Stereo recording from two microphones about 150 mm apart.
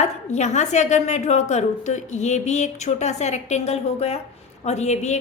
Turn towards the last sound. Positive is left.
turn(degrees=50)  # may be behind; listen again after turning